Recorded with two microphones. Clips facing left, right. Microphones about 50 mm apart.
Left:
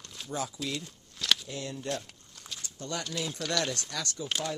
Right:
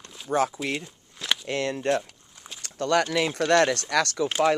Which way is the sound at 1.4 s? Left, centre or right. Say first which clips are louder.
Right 10 dB; right.